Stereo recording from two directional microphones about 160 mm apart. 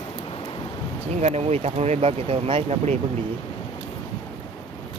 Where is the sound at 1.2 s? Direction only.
40° right (ahead or behind).